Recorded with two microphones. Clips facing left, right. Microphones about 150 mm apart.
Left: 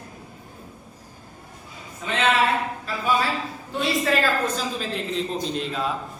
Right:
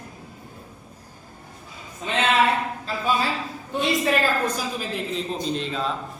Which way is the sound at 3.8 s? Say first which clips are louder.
Right 1 dB; 15° right (ahead or behind).